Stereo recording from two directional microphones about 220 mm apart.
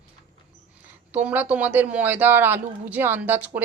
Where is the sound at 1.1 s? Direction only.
5° right (ahead or behind).